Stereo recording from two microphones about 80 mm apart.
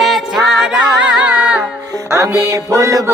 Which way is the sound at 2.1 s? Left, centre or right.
Right.